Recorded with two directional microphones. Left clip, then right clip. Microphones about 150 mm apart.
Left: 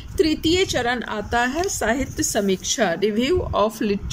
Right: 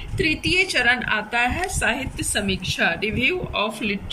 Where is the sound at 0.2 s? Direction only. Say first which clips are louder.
Left 1 dB; 35° left (ahead or behind).